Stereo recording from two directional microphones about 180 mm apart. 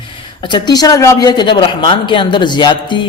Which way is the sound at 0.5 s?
20° left (ahead or behind).